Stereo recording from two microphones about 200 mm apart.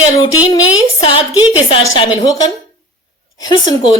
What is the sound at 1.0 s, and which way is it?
Speech, 25° left (ahead or behind).